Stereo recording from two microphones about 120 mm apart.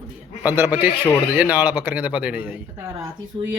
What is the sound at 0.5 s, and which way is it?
A man's voice, 15° right (ahead or behind).